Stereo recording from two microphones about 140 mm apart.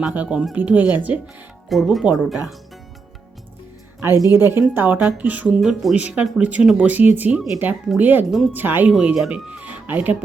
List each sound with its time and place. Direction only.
0.0 s speech: 10° right (ahead or behind)
1.7 s speech: centre (ahead or behind)
4.1 s speech: 25° left (ahead or behind)
4.4 s speech: 15° right (ahead or behind)